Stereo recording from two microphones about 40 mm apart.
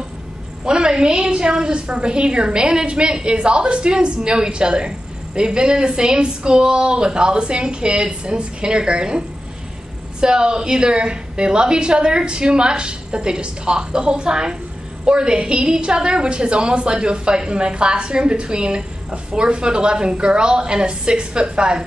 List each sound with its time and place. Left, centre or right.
0.7 s a woman's voice: centre
10.2 s a woman's voice: centre